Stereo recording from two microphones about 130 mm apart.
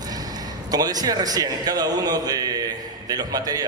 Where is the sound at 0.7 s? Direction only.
30° right (ahead or behind).